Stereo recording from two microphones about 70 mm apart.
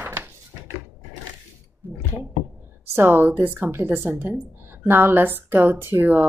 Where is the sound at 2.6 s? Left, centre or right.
Right.